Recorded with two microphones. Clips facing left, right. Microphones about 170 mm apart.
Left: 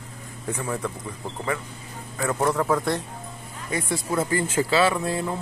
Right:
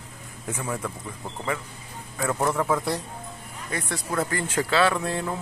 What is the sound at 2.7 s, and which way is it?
Speech, 5° right (ahead or behind).